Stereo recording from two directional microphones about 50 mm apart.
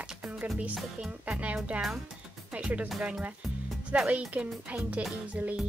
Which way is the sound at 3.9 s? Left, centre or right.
Right.